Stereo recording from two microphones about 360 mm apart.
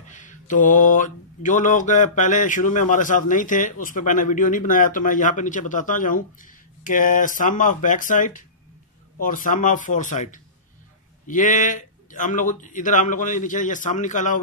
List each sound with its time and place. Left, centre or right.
0.0 s mantra: left